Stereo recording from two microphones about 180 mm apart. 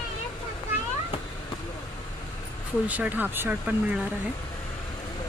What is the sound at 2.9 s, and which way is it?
Speech, 10° right (ahead or behind).